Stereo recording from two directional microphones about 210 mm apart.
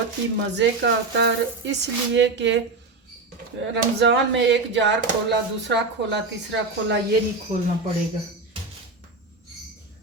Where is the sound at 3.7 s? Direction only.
55° right (ahead or behind).